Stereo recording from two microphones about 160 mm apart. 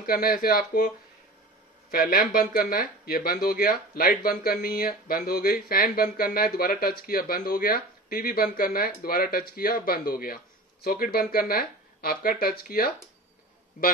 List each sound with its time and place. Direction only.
0.0 s speech: 65° left (ahead or behind)